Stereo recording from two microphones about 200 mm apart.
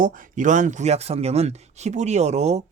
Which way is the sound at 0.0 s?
40° right (ahead or behind).